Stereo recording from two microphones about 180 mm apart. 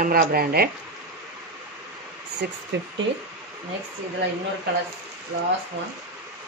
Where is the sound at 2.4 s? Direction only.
65° right (ahead or behind).